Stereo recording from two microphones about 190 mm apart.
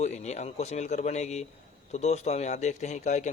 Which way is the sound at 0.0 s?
35° left (ahead or behind).